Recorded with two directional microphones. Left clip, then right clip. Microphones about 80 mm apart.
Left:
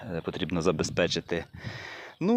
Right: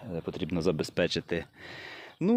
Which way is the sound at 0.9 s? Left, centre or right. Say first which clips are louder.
Left 2 dB; right.